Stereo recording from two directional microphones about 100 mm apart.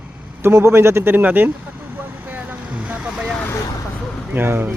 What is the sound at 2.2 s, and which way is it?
Vehicle, 15° right (ahead or behind).